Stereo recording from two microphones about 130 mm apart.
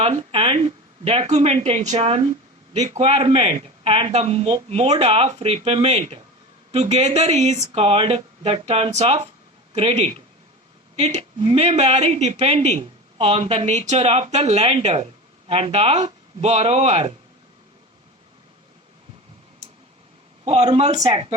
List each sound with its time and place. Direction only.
0.0 s speech: 50° right (ahead or behind)
20.4 s speech: 55° right (ahead or behind)